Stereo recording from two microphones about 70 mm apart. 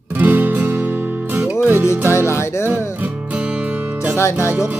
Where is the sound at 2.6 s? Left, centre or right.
Right.